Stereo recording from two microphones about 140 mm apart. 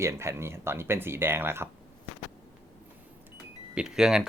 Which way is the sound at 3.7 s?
5° right (ahead or behind).